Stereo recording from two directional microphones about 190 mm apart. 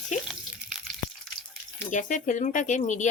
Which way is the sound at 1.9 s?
40° left (ahead or behind).